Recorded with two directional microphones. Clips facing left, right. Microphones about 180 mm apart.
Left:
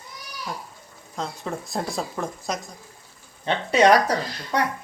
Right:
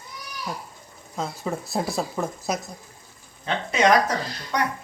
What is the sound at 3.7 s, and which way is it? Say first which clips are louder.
Speech: left 3 dB; 35° left (ahead or behind).